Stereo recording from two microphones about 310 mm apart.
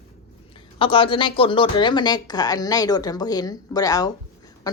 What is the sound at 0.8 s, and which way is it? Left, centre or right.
Speech, centre.